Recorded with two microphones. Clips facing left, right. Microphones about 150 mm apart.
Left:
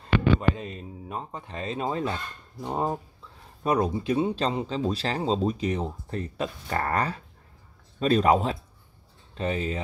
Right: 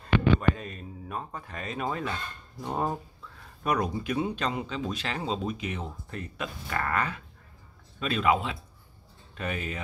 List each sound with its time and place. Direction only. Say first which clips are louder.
0.4 s speech: left 1 dB; 20° left (ahead or behind)
2.6 s speech: left 2 dB; 15° left (ahead or behind)
3.6 s speech: left 4 dB; 30° left (ahead or behind)
9.3 s speech: left 5 dB; 30° left (ahead or behind)